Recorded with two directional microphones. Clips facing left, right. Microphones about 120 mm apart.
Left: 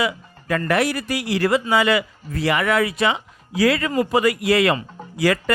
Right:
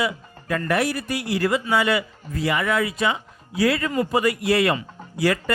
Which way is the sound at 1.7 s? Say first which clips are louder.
Left 3 dB; 90° left.